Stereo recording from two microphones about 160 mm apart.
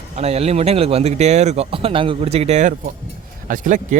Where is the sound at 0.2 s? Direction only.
40° right (ahead or behind).